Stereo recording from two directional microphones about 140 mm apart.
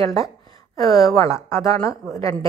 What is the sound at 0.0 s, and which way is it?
A woman's voice, 25° left (ahead or behind).